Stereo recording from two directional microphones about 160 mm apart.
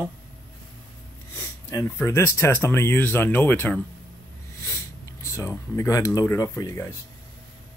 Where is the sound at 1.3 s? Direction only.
20° left (ahead or behind).